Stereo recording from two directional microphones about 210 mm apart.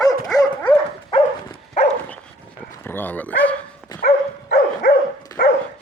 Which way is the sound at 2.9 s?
10° left (ahead or behind).